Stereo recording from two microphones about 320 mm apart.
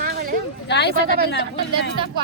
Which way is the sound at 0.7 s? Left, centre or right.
Left.